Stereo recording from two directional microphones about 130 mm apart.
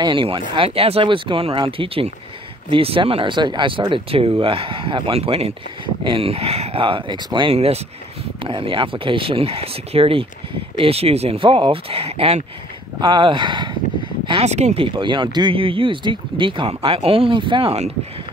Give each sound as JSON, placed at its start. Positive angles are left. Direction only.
{"t": 0.0, "sound": "speech", "side_deg": -40}
{"t": 7.5, "sound": "speech", "side_deg": -55}
{"t": 8.5, "sound": "speech", "side_deg": -40}
{"t": 13.0, "sound": "speech", "side_deg": -35}
{"t": 14.4, "sound": "speech", "side_deg": -60}